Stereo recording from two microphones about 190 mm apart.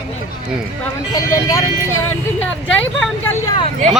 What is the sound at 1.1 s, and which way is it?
Speech, 20° left (ahead or behind).